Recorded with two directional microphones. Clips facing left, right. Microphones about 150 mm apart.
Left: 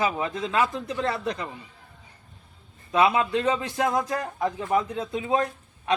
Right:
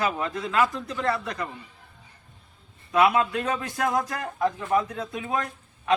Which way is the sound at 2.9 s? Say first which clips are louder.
Even; 25° left (ahead or behind).